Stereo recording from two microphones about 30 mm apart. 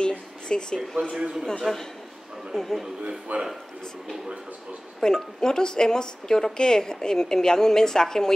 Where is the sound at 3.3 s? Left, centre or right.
Right.